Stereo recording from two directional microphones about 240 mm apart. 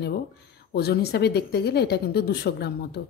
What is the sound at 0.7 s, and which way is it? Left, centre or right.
A woman's voice, left.